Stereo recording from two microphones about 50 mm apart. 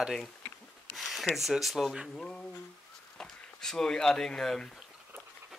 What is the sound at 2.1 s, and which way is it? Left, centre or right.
Speech, centre.